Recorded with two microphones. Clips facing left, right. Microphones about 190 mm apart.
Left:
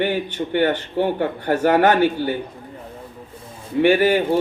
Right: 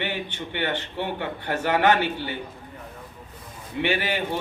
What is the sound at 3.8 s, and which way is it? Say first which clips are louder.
Speech: left 10 dB; 45° left (ahead or behind).